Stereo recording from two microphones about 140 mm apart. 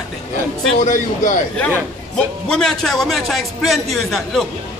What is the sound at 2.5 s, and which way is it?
Speech, 5° left (ahead or behind).